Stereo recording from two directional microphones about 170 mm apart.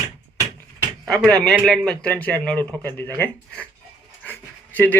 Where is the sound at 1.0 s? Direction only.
Centre (ahead or behind).